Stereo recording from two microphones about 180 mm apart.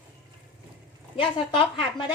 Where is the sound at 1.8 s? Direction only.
25° left (ahead or behind).